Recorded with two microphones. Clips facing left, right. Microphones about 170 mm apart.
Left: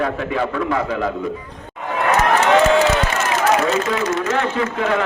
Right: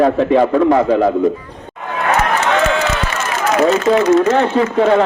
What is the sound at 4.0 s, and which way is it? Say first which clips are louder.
A man's voice: right 8 dB; 35° right (ahead or behind).